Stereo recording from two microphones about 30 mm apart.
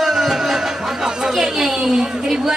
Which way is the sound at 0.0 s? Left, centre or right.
Centre.